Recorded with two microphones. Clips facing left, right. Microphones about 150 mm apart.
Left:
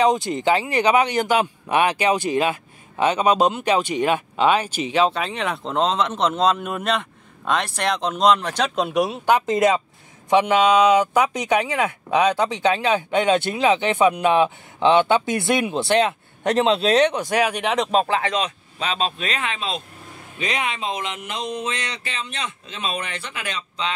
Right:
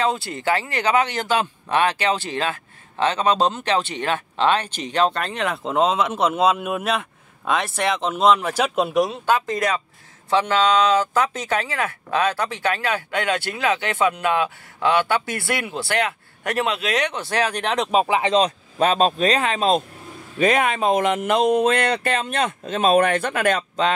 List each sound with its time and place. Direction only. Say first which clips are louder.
0.0 s speech: left 4 dB; 20° left (ahead or behind); by 9.2 s centre (ahead or behind)
9.2 s speech: left 3 dB; 20° left (ahead or behind)
17.1 s speech: left 2 dB; 15° left (ahead or behind)
17.9 s speech: right 3 dB; 15° right (ahead or behind)
18.8 s speech: right 7 dB; 45° right (ahead or behind)